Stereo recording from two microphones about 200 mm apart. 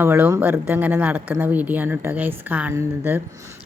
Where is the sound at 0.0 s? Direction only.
10° right (ahead or behind).